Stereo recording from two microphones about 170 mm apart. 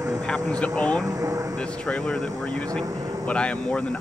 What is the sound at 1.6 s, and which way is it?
Speech, 5° left (ahead or behind).